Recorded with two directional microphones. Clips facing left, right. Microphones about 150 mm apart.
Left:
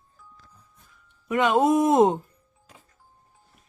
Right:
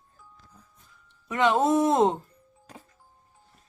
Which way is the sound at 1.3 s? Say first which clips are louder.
Left 2 dB; 15° left (ahead or behind).